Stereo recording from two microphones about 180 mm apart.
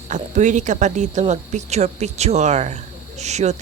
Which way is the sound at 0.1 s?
45° right (ahead or behind).